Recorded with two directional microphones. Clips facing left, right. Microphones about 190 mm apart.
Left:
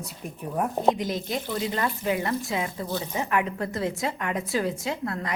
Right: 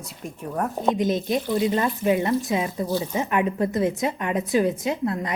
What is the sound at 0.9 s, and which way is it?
Speech, 20° right (ahead or behind).